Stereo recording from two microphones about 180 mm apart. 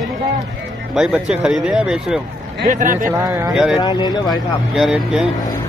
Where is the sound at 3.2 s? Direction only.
15° right (ahead or behind).